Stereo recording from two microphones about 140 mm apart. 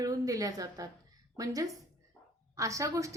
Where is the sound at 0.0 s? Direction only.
25° right (ahead or behind).